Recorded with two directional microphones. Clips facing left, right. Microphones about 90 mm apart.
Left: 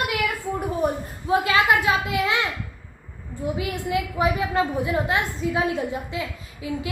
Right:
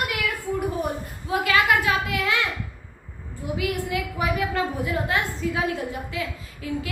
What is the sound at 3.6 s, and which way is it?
A woman's voice, 25° left (ahead or behind).